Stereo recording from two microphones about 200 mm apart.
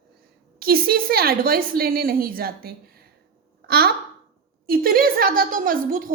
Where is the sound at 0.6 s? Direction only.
50° right (ahead or behind).